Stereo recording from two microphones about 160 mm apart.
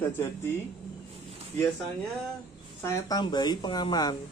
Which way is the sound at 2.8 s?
25° left (ahead or behind).